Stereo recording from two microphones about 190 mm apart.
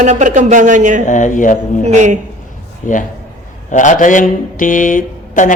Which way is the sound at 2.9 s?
40° left (ahead or behind).